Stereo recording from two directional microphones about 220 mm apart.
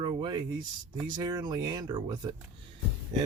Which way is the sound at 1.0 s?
20° right (ahead or behind).